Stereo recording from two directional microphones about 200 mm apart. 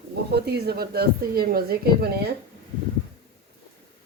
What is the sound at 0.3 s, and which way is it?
Speech, 55° right (ahead or behind).